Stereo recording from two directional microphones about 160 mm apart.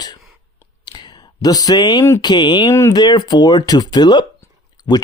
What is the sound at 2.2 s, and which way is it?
Speech, 25° left (ahead or behind).